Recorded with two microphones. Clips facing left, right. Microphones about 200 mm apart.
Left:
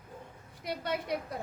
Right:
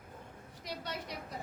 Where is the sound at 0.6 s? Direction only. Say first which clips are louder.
Left 7 dB; 55° left (ahead or behind).